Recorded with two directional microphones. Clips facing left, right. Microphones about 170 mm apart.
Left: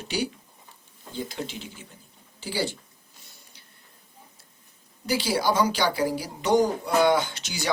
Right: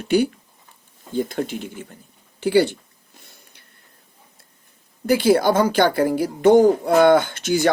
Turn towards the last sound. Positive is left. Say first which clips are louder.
# right 12 dB
turn(degrees=-55)  # may be behind; listen again after turning